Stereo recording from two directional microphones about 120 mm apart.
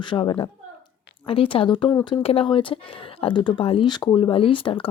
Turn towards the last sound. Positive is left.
turn(degrees=45)  # may be behind; listen again after turning